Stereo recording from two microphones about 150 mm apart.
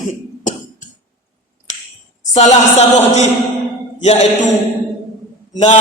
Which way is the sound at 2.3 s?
50° left (ahead or behind).